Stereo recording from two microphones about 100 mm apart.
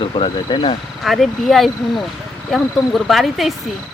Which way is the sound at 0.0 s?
60° left (ahead or behind).